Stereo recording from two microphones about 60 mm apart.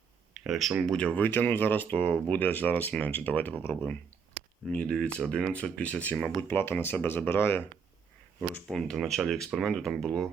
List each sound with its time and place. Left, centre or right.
0.3 s speech: centre
0.9 s speech: centre
1.2 s speech: left
3.6 s speech: left
4.7 s speech: centre
6.1 s speech: centre
6.5 s speech: left
8.7 s speech: centre